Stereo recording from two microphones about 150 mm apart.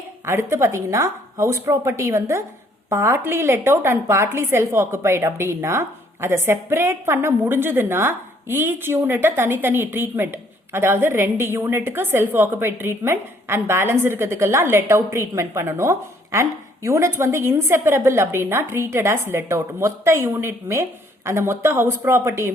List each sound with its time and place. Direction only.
0.3 s a woman's voice: 15° right (ahead or behind)